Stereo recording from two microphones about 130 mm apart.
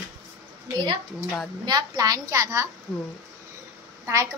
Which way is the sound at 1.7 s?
30° right (ahead or behind).